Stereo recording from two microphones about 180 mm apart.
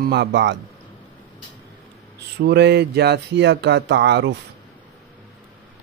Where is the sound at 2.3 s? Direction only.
65° right (ahead or behind).